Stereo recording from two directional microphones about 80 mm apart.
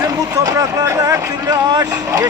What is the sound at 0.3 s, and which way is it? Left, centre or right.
Speech, right.